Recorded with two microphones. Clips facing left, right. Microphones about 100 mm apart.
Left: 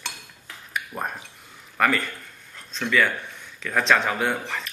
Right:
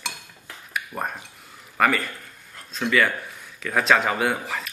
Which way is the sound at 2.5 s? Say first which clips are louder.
Right 1 dB; 5° right (ahead or behind).